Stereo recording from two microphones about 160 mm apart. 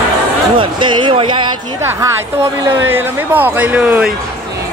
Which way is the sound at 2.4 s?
15° right (ahead or behind).